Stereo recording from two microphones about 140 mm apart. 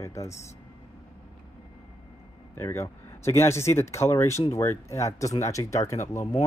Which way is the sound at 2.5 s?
20° left (ahead or behind).